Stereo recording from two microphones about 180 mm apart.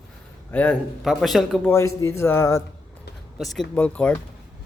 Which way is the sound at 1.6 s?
15° left (ahead or behind).